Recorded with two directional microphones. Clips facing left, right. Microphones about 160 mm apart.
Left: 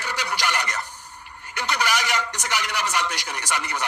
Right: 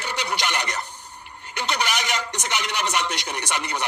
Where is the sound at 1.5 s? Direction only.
20° right (ahead or behind).